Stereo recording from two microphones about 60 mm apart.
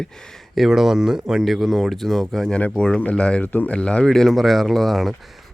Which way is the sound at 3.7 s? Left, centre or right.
Centre.